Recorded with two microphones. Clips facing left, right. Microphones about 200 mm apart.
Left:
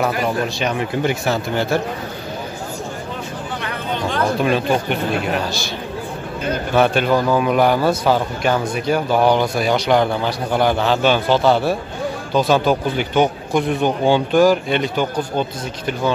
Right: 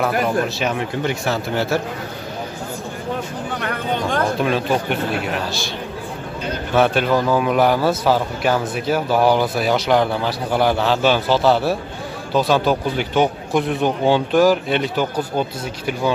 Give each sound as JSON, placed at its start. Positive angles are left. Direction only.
{"t": 0.2, "sound": "a man's voice", "side_deg": 0}
{"t": 3.6, "sound": "a sound", "side_deg": -50}
{"t": 4.4, "sound": "a man's voice", "side_deg": 0}
{"t": 6.7, "sound": "a man's voice", "side_deg": 0}